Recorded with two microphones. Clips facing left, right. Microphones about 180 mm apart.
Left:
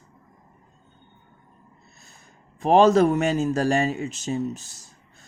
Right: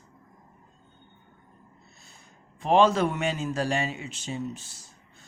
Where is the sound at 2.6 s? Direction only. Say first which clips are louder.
Left 5 dB; 45° left (ahead or behind).